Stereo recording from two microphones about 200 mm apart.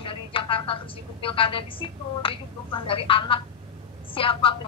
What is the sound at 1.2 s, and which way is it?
A woman's voice, 25° left (ahead or behind).